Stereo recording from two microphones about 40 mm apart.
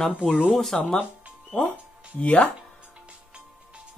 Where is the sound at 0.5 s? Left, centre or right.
Centre.